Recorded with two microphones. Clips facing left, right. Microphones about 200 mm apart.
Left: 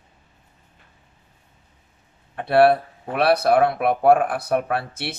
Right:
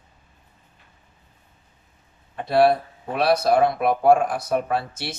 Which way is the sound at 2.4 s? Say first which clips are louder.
Left 2 dB; 60° left (ahead or behind).